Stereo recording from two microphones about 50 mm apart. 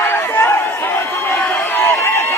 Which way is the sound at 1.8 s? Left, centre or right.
Left.